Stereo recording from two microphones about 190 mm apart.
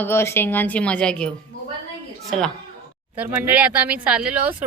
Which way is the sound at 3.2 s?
10° right (ahead or behind).